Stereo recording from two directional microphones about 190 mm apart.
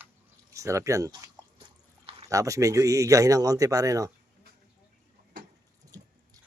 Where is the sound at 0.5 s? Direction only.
15° right (ahead or behind).